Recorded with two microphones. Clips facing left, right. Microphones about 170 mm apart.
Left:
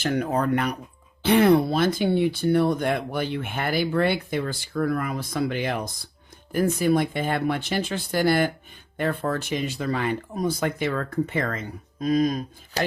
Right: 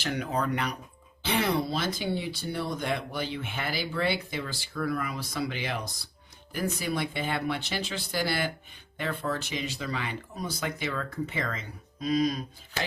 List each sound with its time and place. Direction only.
0.0 s speech: 45° left (ahead or behind)